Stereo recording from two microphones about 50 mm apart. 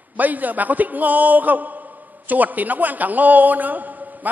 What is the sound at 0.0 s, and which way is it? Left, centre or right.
A man's voice, right.